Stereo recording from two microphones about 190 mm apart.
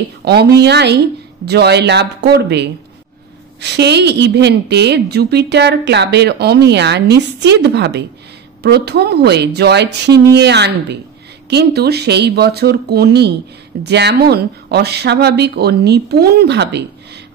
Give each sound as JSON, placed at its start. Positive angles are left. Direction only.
{"t": 0.2, "sound": "a woman's voice", "side_deg": -60}